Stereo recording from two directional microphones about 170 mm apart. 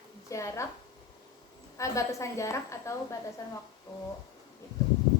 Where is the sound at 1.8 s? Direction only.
20° left (ahead or behind).